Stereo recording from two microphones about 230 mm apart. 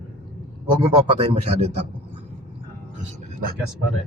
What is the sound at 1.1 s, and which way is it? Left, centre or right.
Speech, right.